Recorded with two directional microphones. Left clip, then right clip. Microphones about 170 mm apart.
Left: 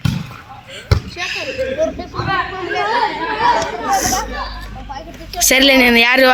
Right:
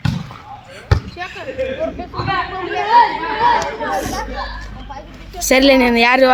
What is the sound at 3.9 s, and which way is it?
Speech, 25° left (ahead or behind).